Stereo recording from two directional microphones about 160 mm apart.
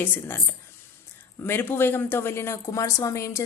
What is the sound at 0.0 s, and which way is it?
Speech, 15° left (ahead or behind).